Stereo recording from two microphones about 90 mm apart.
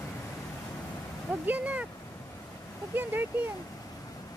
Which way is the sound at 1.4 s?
15° right (ahead or behind).